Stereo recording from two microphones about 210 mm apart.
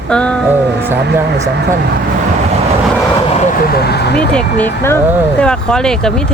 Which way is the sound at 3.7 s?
50° left (ahead or behind).